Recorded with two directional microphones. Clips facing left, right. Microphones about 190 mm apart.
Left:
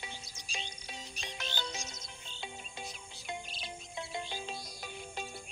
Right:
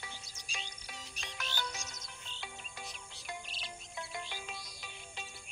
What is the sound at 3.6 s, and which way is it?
Music, 25° left (ahead or behind).